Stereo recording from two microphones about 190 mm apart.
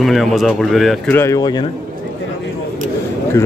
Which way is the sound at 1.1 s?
15° left (ahead or behind).